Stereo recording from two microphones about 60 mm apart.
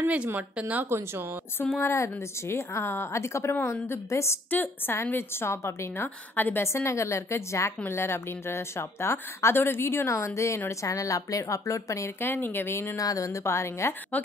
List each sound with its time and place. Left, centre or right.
0.4 s speech: right
0.8 s speech: right
1.6 s a woman's voice: left
4.5 s a woman's voice: left
6.3 s speech: left
6.6 s a woman's voice: left
12.2 s speech: left
12.9 s a woman's voice: left